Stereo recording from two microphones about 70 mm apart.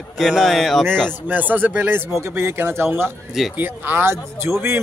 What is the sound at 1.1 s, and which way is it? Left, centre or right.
Speech, right.